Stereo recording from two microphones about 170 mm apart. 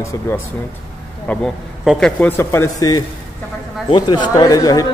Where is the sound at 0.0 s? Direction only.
15° left (ahead or behind).